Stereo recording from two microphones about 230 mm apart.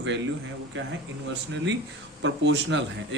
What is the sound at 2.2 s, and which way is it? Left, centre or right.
Speech, right.